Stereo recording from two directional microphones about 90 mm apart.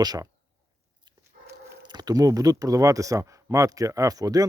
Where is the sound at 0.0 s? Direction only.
45° right (ahead or behind).